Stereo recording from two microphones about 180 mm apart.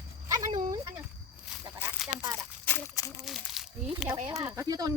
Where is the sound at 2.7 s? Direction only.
15° left (ahead or behind).